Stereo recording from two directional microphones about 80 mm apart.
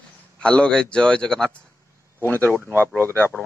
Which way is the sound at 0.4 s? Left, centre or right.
Centre.